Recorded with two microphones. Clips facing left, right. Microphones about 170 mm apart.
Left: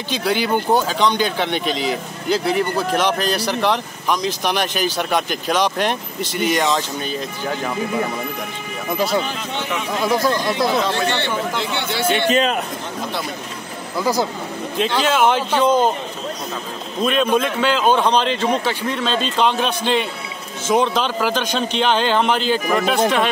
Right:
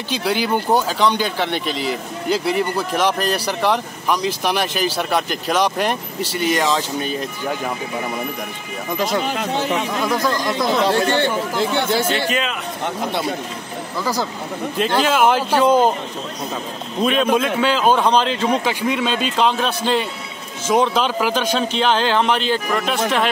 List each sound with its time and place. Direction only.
0.1 s speech: 5° right (ahead or behind)
8.9 s speech: 10° left (ahead or behind)
9.5 s speech: 40° right (ahead or behind)
10.0 s speech: 10° left (ahead or behind)
10.9 s speech: 45° right (ahead or behind)
12.4 s a man's voice: 40° left (ahead or behind)
13.9 s speech: 15° left (ahead or behind)
15.0 s speech: 5° right (ahead or behind)
17.0 s a man's voice: centre (ahead or behind)